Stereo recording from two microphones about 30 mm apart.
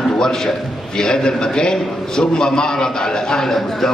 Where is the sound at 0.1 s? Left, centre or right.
Left.